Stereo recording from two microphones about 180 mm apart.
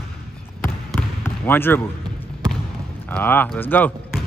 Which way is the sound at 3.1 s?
10° left (ahead or behind).